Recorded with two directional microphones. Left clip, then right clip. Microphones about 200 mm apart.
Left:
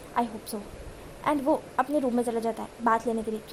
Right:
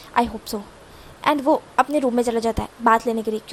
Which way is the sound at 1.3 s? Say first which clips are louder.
Right 7 dB; 30° right (ahead or behind).